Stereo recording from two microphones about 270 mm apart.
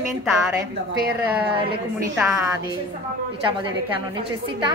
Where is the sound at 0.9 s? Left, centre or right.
Right.